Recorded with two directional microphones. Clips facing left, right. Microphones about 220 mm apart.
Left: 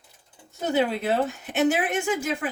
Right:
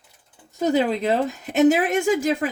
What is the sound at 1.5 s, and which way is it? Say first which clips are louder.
Speech: right 7 dB; 40° right (ahead or behind).